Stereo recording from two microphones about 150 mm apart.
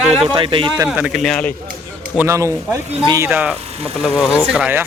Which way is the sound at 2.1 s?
20° right (ahead or behind).